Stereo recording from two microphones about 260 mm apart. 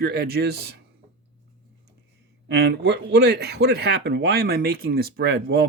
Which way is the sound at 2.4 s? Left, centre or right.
Right.